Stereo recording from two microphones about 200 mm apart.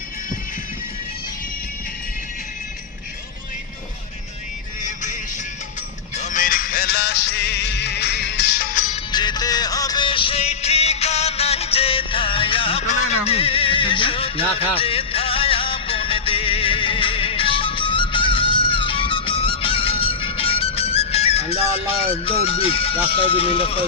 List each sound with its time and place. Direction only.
4.8 s music: 40° left (ahead or behind)
6.2 s music: 40° left (ahead or behind)
9.1 s music: 20° left (ahead or behind)
22.4 s speech: 30° left (ahead or behind)